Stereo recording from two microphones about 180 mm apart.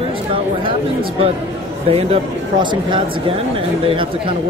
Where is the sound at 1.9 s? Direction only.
35° right (ahead or behind).